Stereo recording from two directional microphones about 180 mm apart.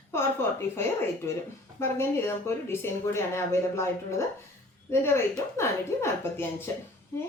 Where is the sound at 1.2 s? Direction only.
15° left (ahead or behind).